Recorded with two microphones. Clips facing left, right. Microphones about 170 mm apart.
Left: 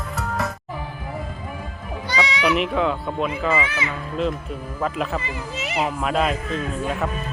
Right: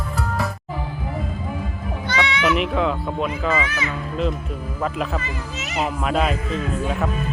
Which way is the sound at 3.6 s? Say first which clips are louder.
Even; 30° left (ahead or behind).